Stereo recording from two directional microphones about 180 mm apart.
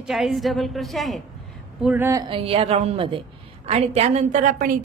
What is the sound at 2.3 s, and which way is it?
A woman's voice, 30° right (ahead or behind).